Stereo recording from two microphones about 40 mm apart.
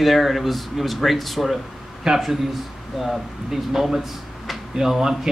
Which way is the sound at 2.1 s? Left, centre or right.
Centre.